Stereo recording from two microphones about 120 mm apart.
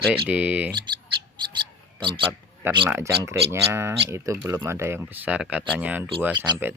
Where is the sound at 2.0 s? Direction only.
45° right (ahead or behind).